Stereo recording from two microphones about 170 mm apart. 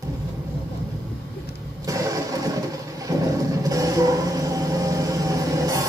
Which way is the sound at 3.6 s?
20° right (ahead or behind).